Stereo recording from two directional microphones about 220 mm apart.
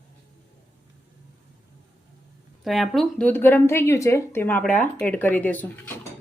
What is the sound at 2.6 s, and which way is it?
Speech, centre (ahead or behind).